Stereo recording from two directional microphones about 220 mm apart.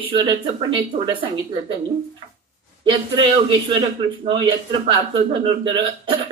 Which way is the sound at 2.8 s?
20° right (ahead or behind).